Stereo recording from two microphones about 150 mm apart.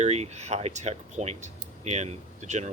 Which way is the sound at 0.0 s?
45° right (ahead or behind).